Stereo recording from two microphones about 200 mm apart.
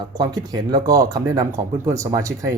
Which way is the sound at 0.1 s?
20° right (ahead or behind).